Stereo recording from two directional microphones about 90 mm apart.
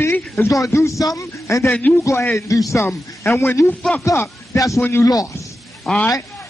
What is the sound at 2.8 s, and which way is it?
Speech, 25° left (ahead or behind).